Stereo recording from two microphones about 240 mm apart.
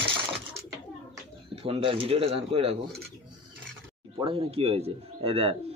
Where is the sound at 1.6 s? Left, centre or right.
Right.